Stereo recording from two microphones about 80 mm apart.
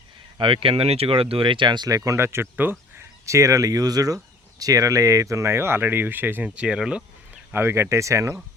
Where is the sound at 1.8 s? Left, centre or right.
Right.